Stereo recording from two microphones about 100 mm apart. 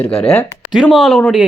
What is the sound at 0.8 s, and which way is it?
Speech, centre (ahead or behind).